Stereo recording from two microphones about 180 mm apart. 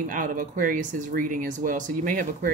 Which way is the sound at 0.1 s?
50° right (ahead or behind).